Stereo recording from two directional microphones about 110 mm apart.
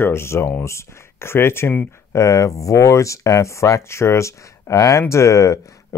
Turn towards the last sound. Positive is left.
turn(degrees=30)  # may be behind; listen again after turning